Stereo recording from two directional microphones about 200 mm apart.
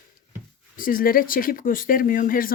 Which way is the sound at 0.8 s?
45° left (ahead or behind).